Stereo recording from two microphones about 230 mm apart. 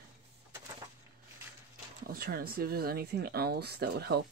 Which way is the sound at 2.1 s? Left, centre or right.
Right.